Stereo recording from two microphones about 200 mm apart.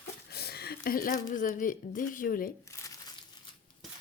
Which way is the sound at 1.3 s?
40° left (ahead or behind).